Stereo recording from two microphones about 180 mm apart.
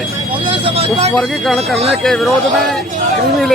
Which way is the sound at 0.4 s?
30° right (ahead or behind).